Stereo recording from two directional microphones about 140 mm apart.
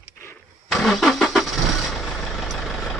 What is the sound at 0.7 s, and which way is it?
Vehicle, 5° left (ahead or behind).